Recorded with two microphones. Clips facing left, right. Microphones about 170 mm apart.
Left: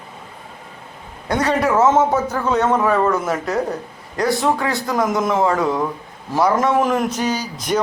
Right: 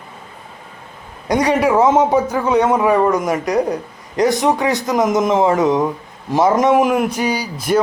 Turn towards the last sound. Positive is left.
turn(degrees=-5)  # may be behind; listen again after turning